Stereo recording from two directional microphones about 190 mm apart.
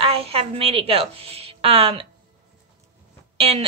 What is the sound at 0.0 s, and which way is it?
A woman's voice, 30° right (ahead or behind).